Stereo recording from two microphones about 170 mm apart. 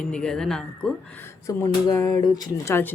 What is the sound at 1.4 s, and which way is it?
Speech, 20° left (ahead or behind).